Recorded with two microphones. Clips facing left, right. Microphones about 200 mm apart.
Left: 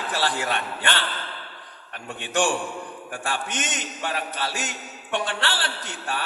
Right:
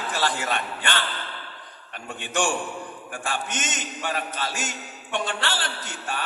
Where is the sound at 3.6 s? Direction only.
45° right (ahead or behind).